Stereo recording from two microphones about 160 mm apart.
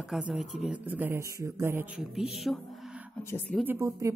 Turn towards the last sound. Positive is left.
turn(degrees=-20)  # may be behind; listen again after turning